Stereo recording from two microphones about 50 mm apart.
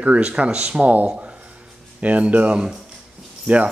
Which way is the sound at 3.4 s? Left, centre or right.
Right.